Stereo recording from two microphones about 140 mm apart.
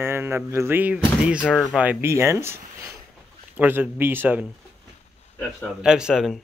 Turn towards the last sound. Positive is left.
turn(degrees=0)  # may be behind; listen again after turning